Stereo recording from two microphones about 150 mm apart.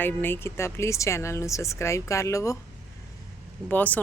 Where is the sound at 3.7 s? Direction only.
10° left (ahead or behind).